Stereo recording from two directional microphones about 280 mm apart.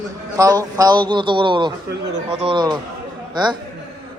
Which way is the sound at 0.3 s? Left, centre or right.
Centre.